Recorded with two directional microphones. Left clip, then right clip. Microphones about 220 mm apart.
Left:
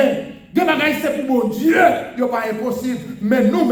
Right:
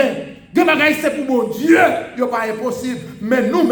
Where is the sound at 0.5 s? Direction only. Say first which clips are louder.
Right 3 dB; 20° right (ahead or behind).